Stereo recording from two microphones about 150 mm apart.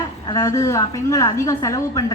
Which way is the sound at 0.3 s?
20° left (ahead or behind).